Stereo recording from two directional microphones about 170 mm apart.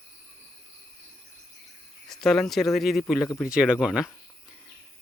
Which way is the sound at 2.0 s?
5° left (ahead or behind).